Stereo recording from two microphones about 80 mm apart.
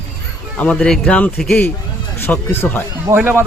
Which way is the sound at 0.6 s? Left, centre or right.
Centre.